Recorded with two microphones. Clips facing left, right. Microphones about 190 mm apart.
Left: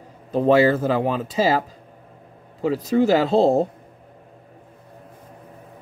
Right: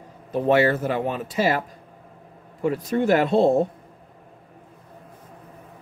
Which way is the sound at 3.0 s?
90° left.